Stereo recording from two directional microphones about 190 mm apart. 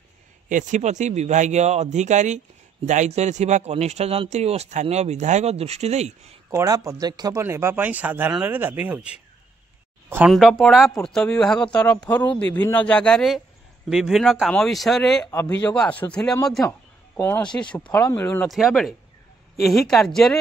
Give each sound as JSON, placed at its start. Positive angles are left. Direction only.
{"t": 0.5, "sound": "speech", "side_deg": -40}
{"t": 6.5, "sound": "speech", "side_deg": -15}
{"t": 18.5, "sound": "speech", "side_deg": 0}